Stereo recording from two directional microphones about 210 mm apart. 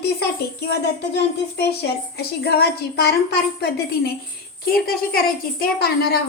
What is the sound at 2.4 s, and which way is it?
A woman's voice, 50° left (ahead or behind).